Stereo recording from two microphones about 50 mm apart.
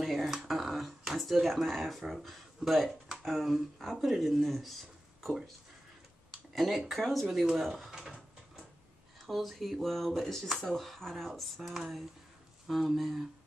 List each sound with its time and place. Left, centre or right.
0.0 s a sound: centre
3.2 s speech: centre
6.5 s speech: centre
9.2 s speech: centre